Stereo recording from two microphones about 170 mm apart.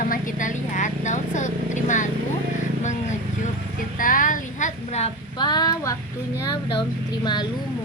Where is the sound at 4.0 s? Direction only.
50° left (ahead or behind).